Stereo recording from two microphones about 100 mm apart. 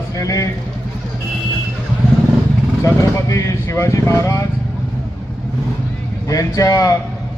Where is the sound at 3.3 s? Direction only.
30° left (ahead or behind).